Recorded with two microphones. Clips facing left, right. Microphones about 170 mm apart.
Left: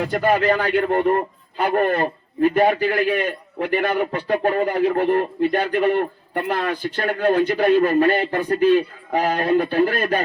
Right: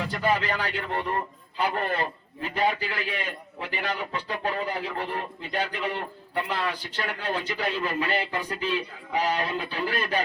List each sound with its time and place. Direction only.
0.0 s a man's voice: 60° left (ahead or behind)